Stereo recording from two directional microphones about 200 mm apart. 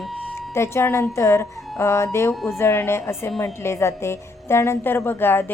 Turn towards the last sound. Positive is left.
turn(degrees=10)  # may be behind; listen again after turning